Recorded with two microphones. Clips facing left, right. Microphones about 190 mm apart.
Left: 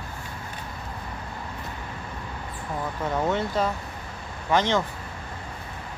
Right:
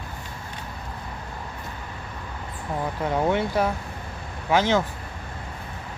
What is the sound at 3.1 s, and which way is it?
A woman's voice, 10° right (ahead or behind).